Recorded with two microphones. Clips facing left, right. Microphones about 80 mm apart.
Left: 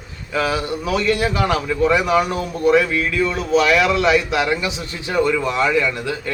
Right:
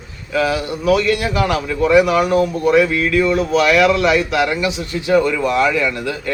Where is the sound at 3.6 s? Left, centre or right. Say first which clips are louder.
Right 1 dB; left.